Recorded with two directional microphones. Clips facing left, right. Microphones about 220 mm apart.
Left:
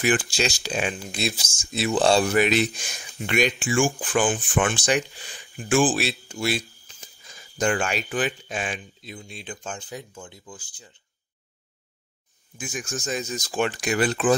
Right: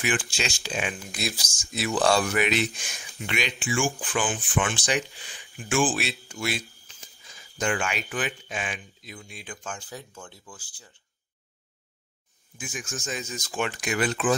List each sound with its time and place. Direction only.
0.0 s speech: 40° left (ahead or behind); by 10.9 s 20° left (ahead or behind)
12.5 s speech: 40° left (ahead or behind)